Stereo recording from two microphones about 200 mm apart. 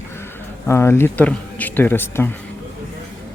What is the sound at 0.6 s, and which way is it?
Speech, 15° left (ahead or behind).